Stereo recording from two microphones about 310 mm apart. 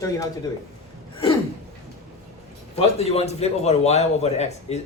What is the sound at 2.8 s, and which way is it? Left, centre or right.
A man's voice, centre.